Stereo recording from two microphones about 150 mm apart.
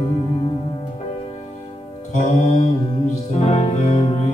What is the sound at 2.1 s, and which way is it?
Music, 55° left (ahead or behind).